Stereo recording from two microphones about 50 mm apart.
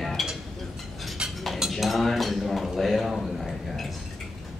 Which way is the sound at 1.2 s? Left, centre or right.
Centre.